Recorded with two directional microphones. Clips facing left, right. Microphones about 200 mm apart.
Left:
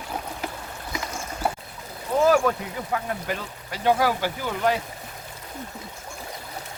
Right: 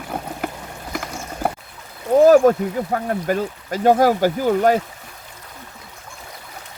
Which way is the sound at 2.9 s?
45° right (ahead or behind).